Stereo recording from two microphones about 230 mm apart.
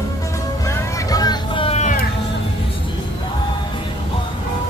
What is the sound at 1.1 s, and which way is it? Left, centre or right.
Vehicle, centre.